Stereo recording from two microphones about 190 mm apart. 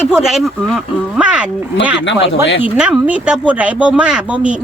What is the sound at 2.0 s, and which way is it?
Speech, 75° left (ahead or behind).